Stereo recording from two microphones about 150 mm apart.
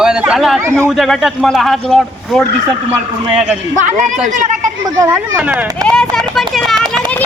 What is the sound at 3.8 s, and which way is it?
Speech, 55° right (ahead or behind).